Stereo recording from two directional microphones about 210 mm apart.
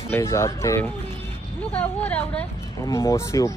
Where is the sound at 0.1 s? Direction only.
15° left (ahead or behind).